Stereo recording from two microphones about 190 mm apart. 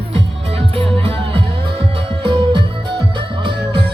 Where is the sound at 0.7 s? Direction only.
30° right (ahead or behind).